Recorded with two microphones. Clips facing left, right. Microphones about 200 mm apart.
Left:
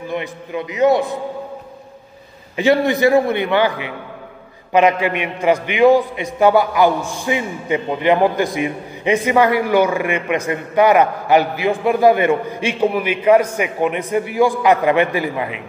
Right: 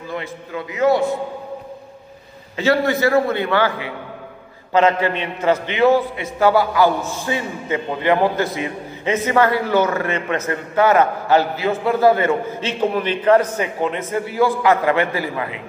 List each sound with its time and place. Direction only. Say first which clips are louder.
0.1 s a man's voice: left 3 dB; 20° left (ahead or behind)
2.5 s a man's voice: left 2 dB; 15° left (ahead or behind)